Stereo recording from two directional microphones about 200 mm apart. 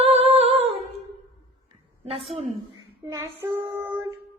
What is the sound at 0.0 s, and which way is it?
Humming, 30° right (ahead or behind).